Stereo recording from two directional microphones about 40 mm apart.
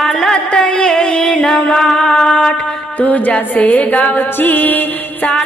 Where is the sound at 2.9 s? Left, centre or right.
Left.